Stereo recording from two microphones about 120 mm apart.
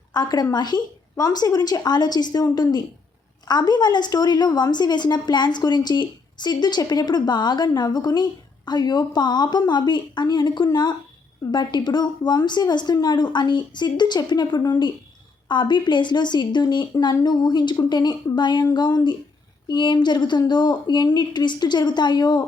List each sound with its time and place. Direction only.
0.1 s a woman's voice: 35° left (ahead or behind)